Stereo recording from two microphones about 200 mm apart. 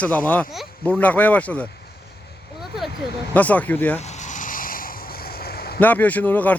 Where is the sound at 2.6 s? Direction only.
Centre (ahead or behind).